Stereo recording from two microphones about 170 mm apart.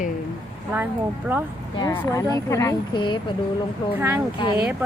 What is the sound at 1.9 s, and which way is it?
Speech, 20° left (ahead or behind).